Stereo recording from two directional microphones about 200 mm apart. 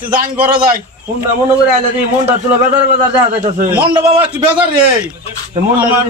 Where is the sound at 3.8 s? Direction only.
25° right (ahead or behind).